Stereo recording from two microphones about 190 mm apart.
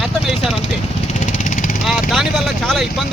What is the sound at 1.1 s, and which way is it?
Vehicle, 40° left (ahead or behind).